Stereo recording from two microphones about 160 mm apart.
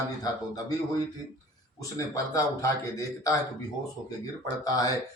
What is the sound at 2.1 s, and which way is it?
Speech, 20° left (ahead or behind).